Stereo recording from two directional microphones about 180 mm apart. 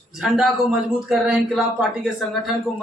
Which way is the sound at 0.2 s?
Centre (ahead or behind).